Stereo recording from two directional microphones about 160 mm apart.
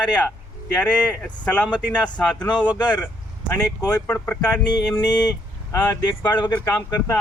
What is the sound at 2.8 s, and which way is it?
Speech, 25° left (ahead or behind).